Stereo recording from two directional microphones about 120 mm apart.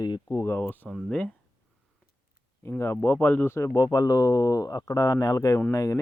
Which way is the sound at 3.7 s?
30° left (ahead or behind).